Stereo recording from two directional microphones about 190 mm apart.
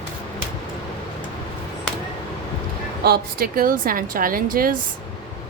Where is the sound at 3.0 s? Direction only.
55° right (ahead or behind).